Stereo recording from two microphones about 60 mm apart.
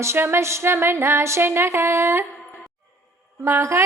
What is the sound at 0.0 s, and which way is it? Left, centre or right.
A woman's voice, right.